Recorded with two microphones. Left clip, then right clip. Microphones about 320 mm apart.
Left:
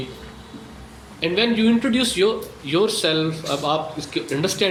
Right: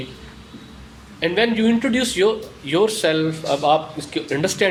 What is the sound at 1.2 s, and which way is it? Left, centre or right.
A man's voice, right.